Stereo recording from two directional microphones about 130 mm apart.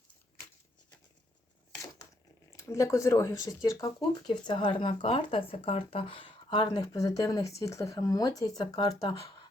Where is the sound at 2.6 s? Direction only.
25° left (ahead or behind).